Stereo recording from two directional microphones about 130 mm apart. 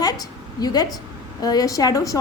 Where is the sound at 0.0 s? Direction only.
30° left (ahead or behind).